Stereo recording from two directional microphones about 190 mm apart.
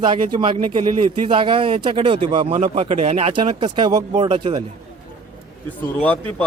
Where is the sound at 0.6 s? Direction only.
35° right (ahead or behind).